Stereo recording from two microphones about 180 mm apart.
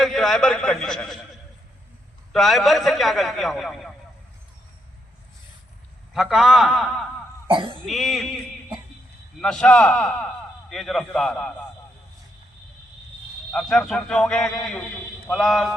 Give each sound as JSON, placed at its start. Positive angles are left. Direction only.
{"t": 0.0, "sound": "a man's voice", "side_deg": 0}
{"t": 2.3, "sound": "a man's voice", "side_deg": 0}
{"t": 6.1, "sound": "a man's voice", "side_deg": -5}
{"t": 7.4, "sound": "speech", "side_deg": -30}
{"t": 7.9, "sound": "a man's voice", "side_deg": 0}
{"t": 9.4, "sound": "a man's voice", "side_deg": 5}
{"t": 13.5, "sound": "a man's voice", "side_deg": 5}